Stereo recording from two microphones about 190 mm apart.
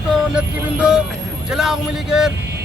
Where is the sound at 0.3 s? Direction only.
5° right (ahead or behind).